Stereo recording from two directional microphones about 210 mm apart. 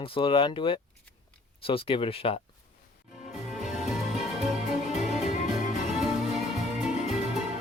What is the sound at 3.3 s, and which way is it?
Music, centre (ahead or behind).